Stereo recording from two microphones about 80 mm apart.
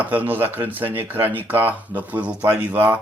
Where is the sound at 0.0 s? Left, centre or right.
Right.